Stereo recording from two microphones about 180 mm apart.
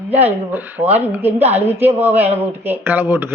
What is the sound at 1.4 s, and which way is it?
Speech, 35° right (ahead or behind).